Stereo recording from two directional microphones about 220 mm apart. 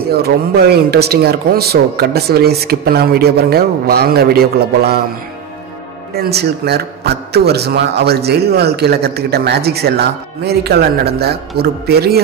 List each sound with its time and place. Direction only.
0.1 s speech: 45° right (ahead or behind)
6.1 s speech: 45° right (ahead or behind)